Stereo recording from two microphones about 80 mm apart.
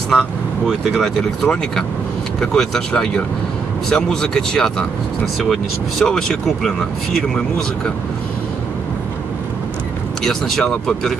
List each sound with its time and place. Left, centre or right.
0.1 s speech: centre
10.2 s speech: centre